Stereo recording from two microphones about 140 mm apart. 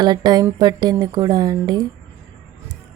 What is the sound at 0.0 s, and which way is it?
A woman's voice, 30° right (ahead or behind).